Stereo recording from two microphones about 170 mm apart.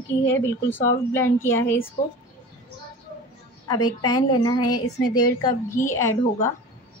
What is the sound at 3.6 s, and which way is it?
A woman's voice, 25° left (ahead or behind).